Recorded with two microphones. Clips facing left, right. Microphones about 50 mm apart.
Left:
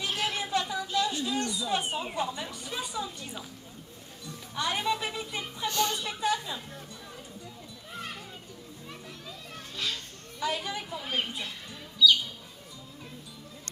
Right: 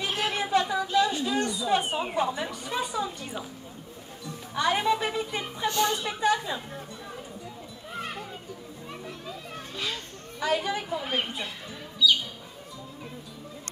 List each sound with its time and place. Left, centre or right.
0.0 s a sound: centre
4.6 s a woman's voice: centre
5.7 s speech: right
5.9 s a woman's voice: centre
7.9 s children playing: centre
10.4 s a woman's voice: centre